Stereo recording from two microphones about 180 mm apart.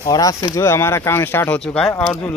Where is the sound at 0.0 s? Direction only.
20° left (ahead or behind).